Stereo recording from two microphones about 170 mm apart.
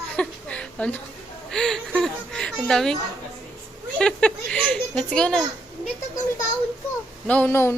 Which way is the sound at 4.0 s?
5° left (ahead or behind).